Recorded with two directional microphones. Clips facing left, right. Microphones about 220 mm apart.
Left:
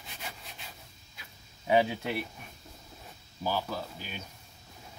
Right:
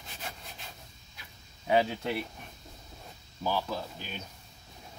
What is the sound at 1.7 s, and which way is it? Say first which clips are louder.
Speech: left 1 dB; 15° left (ahead or behind).